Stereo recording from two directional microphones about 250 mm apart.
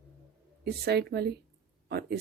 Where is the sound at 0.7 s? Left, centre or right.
Right.